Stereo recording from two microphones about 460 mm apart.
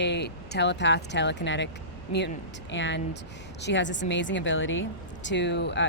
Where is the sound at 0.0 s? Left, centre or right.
Left.